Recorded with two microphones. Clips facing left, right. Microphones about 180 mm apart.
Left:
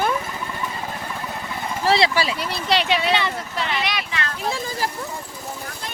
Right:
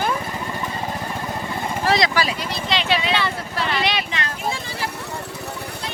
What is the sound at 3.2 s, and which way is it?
Vehicle, 20° left (ahead or behind).